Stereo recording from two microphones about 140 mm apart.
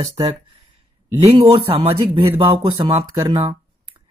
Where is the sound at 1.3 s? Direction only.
40° right (ahead or behind).